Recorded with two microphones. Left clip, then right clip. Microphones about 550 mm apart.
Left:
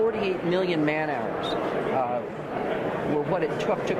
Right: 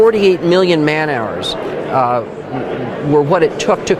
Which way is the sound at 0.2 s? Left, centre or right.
Right.